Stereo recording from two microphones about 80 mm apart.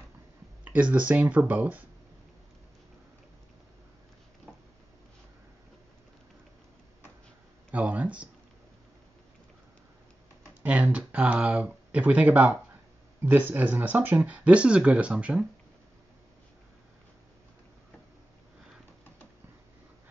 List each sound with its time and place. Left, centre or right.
0.7 s speech: centre
7.7 s a sound: centre
10.6 s speech: centre